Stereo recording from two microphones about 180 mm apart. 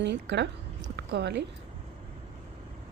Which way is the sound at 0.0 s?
70° right (ahead or behind).